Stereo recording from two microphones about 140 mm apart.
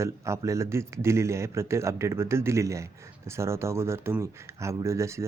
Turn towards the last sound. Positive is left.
turn(degrees=-20)  # may be behind; listen again after turning